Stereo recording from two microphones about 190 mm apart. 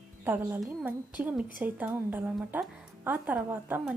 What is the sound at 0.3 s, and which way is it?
A woman's voice, 5° right (ahead or behind).